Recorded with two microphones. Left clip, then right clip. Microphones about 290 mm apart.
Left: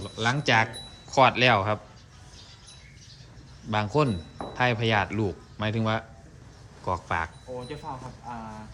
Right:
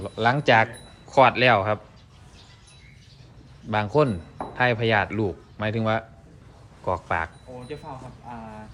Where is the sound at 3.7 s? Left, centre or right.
Centre.